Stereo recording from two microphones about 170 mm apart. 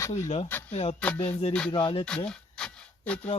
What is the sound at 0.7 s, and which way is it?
Speech, 40° left (ahead or behind).